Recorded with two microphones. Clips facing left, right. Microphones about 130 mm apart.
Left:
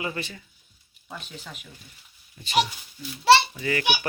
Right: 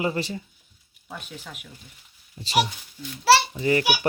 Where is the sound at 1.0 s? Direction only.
5° right (ahead or behind).